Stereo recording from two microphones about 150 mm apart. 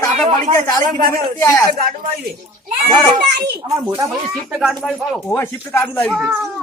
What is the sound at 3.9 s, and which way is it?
Speech, 25° right (ahead or behind).